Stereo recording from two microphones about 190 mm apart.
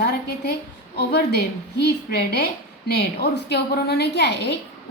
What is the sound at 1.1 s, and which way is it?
A woman's voice, 60° left (ahead or behind).